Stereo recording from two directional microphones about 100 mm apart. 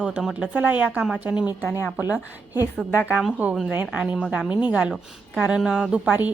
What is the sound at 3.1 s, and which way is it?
Speech, 5° right (ahead or behind).